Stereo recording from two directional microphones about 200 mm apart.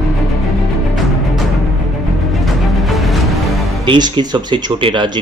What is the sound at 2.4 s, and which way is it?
Music, centre (ahead or behind).